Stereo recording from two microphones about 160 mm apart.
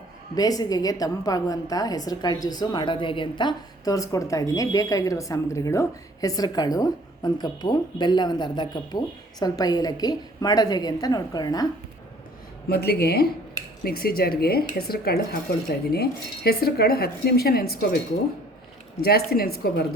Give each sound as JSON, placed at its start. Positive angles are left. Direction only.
{"t": 0.3, "sound": "a woman's voice", "side_deg": 25}
{"t": 12.6, "sound": "speech", "side_deg": 75}
{"t": 19.0, "sound": "speech", "side_deg": 70}